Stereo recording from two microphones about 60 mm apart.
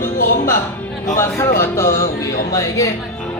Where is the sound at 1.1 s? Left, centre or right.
Left.